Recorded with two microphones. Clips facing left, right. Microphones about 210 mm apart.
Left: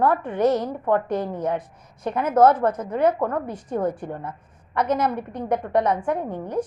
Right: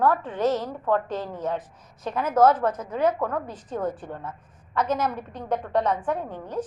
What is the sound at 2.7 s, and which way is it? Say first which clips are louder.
Speech: left 3 dB; 60° left (ahead or behind).